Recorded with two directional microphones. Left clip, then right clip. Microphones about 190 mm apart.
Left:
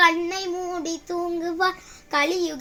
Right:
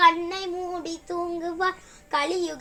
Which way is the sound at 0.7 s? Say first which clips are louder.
Left 3 dB; 65° left (ahead or behind).